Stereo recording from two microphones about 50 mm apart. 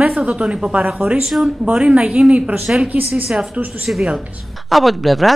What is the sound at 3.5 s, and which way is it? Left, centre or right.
Speech, right.